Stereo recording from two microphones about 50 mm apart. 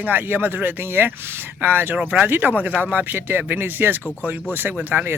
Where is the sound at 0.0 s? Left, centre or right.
Right.